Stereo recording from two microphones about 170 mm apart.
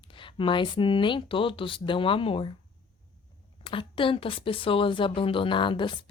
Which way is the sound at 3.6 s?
30° left (ahead or behind).